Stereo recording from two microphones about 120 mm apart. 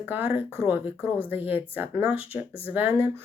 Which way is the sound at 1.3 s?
15° right (ahead or behind).